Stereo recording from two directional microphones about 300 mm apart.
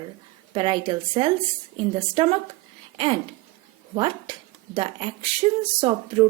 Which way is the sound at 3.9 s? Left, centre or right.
Centre.